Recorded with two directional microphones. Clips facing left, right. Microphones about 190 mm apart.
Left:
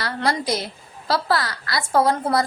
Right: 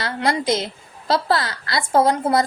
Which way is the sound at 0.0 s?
25° right (ahead or behind).